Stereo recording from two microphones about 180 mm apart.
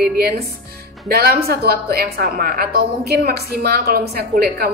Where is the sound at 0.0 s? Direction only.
60° right (ahead or behind).